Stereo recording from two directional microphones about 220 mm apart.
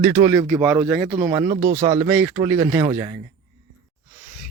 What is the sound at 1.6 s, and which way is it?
Speech, 35° right (ahead or behind).